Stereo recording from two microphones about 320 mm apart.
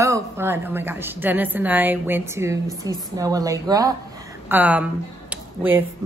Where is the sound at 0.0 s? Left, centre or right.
Centre.